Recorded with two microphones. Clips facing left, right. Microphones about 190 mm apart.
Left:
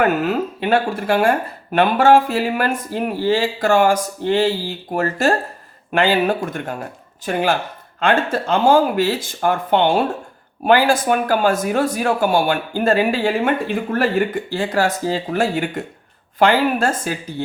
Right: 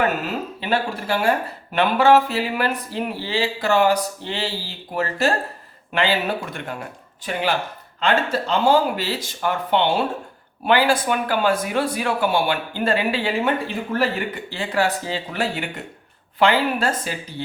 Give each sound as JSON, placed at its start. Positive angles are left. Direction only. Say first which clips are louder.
{"t": 0.6, "sound": "speech", "louder": "left 4 dB", "side_deg": 55}